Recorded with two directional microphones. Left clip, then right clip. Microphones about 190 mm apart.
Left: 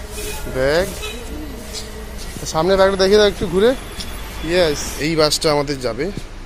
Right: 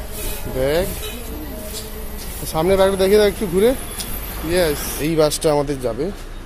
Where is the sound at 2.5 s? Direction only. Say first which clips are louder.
Left 1 dB; 5° right (ahead or behind).